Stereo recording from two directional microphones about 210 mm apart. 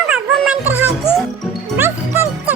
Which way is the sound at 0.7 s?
10° right (ahead or behind).